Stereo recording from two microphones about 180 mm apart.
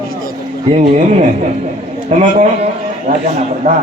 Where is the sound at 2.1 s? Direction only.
40° right (ahead or behind).